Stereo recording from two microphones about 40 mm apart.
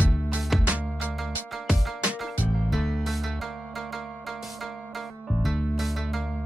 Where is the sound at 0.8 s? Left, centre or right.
Right.